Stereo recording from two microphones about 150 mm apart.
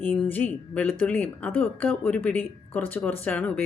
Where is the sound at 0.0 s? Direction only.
10° left (ahead or behind).